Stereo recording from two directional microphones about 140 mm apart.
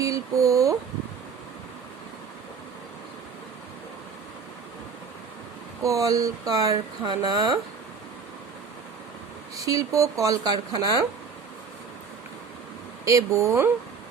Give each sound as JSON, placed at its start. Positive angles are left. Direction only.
{"t": 0.0, "sound": "a sound", "side_deg": -25}
{"t": 5.8, "sound": "speech", "side_deg": -25}
{"t": 9.6, "sound": "speech", "side_deg": -25}
{"t": 13.1, "sound": "speech", "side_deg": -20}